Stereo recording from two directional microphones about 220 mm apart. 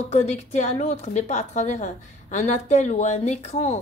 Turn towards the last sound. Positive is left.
turn(degrees=30)  # may be behind; listen again after turning